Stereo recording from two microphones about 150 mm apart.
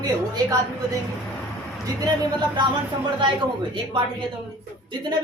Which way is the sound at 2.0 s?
30° right (ahead or behind).